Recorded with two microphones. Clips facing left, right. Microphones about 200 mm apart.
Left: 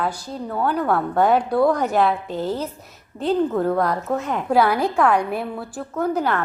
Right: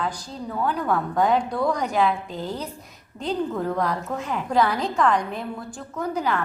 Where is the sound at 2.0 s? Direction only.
40° left (ahead or behind).